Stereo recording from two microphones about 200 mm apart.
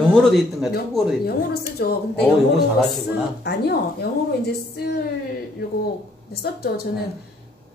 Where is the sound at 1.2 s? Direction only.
50° left (ahead or behind).